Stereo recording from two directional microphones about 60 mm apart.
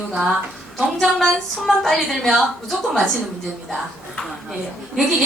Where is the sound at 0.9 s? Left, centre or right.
Centre.